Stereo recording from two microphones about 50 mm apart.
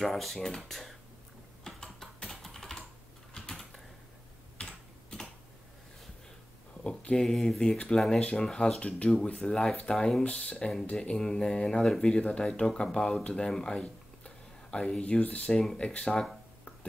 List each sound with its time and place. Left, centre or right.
0.0 s speech: centre
1.6 s typing: centre
6.8 s a sound: centre
7.2 s speech: centre
10.2 s speech: left
15.6 s speech: centre